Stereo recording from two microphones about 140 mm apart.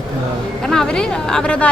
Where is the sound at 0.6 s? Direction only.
5° left (ahead or behind).